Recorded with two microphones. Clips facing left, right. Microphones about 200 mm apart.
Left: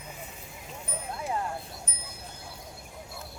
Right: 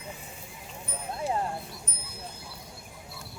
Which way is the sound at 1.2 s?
30° right (ahead or behind).